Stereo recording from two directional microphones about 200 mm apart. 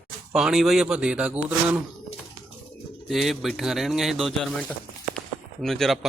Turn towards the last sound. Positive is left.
turn(degrees=0)  # may be behind; listen again after turning